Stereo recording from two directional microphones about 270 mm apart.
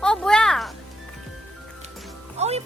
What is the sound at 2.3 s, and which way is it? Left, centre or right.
Music, right.